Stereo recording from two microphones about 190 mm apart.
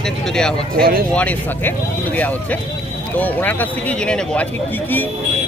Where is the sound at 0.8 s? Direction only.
50° right (ahead or behind).